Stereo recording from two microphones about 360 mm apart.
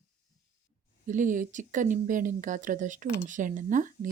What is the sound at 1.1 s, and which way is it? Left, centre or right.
Speech, right.